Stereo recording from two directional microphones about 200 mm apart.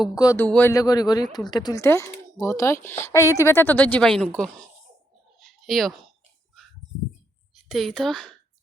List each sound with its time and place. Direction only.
0.0 s speech: 20° left (ahead or behind)
5.4 s a sound: centre (ahead or behind)
7.5 s speech: centre (ahead or behind)